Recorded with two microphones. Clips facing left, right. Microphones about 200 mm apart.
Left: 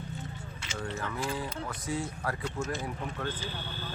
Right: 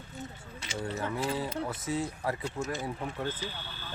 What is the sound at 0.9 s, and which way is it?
Speech, 25° right (ahead or behind).